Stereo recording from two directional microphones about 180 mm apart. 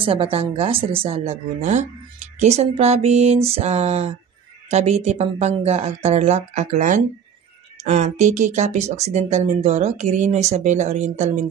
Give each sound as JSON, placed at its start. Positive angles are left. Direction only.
{"t": 0.0, "sound": "speech", "side_deg": -30}